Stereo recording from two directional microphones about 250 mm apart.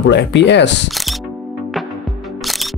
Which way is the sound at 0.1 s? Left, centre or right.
Left.